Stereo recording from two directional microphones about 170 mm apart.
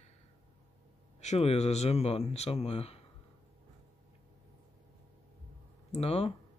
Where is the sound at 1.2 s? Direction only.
40° left (ahead or behind).